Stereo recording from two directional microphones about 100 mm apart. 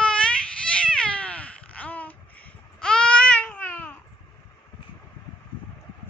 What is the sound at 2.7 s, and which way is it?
Baby cry, 10° left (ahead or behind).